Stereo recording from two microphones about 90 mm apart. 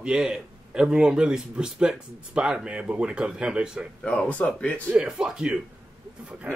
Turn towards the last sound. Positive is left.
turn(degrees=-15)  # may be behind; listen again after turning